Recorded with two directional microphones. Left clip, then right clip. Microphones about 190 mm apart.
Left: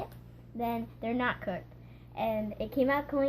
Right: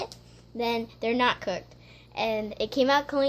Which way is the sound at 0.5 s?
45° right (ahead or behind).